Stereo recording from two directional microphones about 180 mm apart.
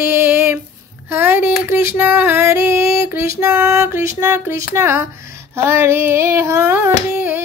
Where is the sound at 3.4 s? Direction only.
15° right (ahead or behind).